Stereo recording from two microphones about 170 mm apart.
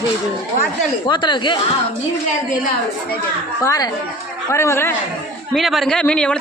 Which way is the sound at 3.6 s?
20° left (ahead or behind).